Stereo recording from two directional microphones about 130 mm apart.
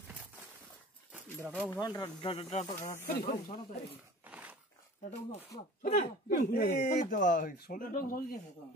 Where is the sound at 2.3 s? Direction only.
65° left (ahead or behind).